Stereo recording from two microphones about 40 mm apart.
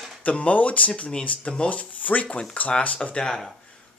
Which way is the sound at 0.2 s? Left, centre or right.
Left.